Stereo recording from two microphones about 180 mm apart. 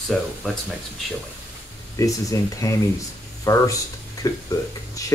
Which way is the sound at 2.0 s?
20° left (ahead or behind).